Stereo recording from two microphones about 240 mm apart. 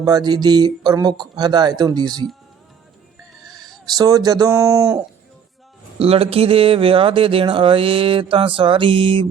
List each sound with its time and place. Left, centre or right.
0.0 s speech: centre
3.8 s speech: centre
6.0 s speech: right